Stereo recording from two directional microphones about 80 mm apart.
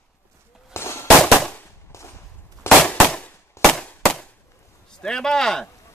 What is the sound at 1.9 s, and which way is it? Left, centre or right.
Walk, left.